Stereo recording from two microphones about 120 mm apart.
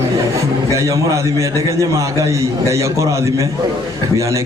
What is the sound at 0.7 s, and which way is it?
A man's voice, 25° right (ahead or behind).